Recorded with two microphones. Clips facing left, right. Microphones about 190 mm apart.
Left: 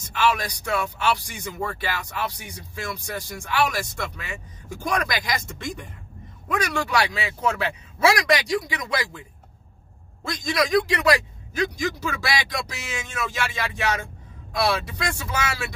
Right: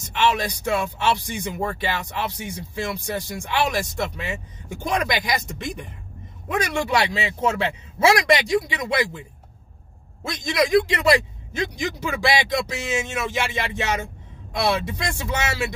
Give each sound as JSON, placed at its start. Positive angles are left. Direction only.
{"t": 0.1, "sound": "speech", "side_deg": -25}
{"t": 10.2, "sound": "speech", "side_deg": -25}